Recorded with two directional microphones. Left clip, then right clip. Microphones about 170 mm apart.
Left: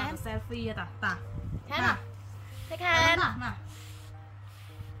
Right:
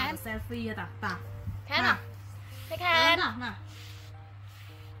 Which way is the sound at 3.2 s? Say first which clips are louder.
Left 2 dB; 20° left (ahead or behind).